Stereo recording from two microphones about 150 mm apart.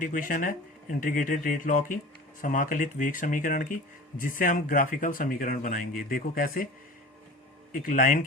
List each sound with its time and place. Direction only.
0.0 s speech: 65° left (ahead or behind)
7.7 s speech: 65° left (ahead or behind)